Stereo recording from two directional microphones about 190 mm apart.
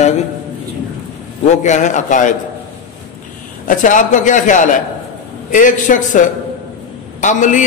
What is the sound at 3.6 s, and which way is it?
A man's voice, 45° left (ahead or behind).